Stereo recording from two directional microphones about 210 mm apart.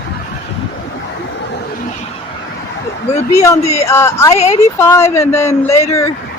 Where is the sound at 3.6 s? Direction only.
30° left (ahead or behind).